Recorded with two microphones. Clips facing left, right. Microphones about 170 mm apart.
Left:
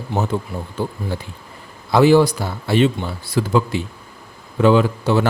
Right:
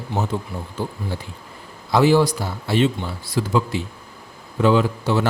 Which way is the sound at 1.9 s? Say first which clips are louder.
Left 3 dB; 60° left (ahead or behind).